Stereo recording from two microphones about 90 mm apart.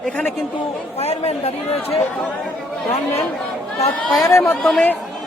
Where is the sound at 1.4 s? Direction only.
90° left.